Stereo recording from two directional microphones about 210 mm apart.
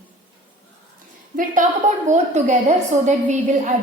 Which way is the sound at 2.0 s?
35° right (ahead or behind).